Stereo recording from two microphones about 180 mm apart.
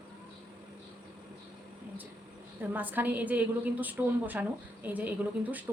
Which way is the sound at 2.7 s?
10° right (ahead or behind).